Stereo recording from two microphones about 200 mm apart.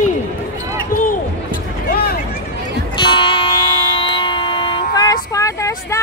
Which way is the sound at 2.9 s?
25° left (ahead or behind).